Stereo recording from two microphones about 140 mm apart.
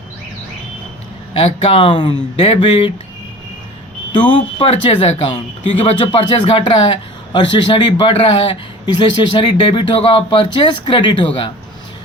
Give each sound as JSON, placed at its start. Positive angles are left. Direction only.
{"t": 1.4, "sound": "speech", "side_deg": 40}
{"t": 4.1, "sound": "speech", "side_deg": 35}